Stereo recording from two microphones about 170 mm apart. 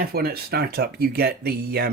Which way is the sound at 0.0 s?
65° right (ahead or behind).